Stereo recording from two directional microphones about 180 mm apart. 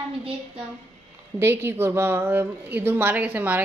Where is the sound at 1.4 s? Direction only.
15° right (ahead or behind).